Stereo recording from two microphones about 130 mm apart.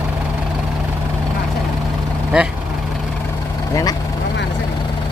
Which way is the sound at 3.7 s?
30° left (ahead or behind).